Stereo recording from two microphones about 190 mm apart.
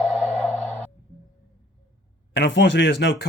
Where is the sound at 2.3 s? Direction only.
65° left (ahead or behind).